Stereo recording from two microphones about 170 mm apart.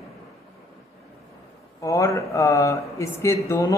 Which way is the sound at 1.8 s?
20° left (ahead or behind).